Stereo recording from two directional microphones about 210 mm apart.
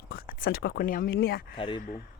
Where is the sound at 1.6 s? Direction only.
25° left (ahead or behind).